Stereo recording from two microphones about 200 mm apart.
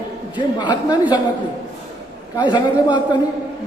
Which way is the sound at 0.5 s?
20° left (ahead or behind).